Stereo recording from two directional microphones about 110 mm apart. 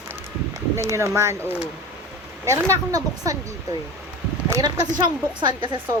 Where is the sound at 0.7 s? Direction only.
25° right (ahead or behind).